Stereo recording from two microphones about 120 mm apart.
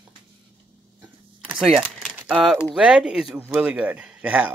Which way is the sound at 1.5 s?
5° right (ahead or behind).